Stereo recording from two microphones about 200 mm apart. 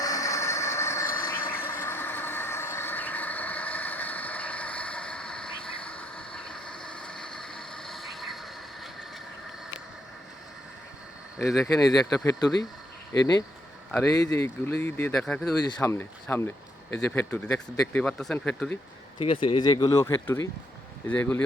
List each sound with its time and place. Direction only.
0.0 s train: 15° left (ahead or behind); by 8.9 s centre (ahead or behind)
11.4 s speech: centre (ahead or behind)
11.7 s speech: 20° left (ahead or behind)
19.2 s speech: 25° left (ahead or behind); by 21.4 s 10° left (ahead or behind)